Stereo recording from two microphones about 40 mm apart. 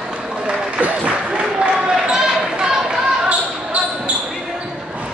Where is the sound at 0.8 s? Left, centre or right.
Right.